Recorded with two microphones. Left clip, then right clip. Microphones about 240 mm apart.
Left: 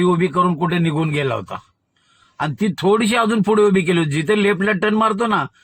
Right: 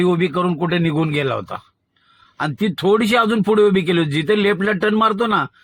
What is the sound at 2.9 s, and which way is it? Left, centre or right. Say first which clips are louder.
A man's voice: right 1 dB; left.